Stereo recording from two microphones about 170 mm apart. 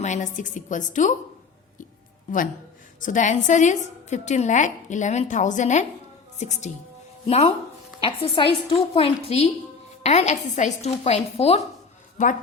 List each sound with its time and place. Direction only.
0.0 s a woman's voice: 45° left (ahead or behind)
2.3 s a woman's voice: 50° left (ahead or behind)
12.1 s a woman's voice: 50° left (ahead or behind)